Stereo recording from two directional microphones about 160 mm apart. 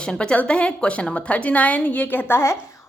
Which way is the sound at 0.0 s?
5° left (ahead or behind).